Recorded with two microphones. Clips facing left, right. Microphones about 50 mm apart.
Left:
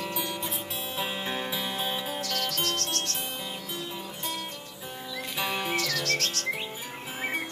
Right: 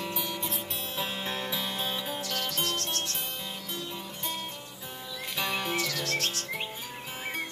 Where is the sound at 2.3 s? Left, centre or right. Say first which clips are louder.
Left 2 dB; centre.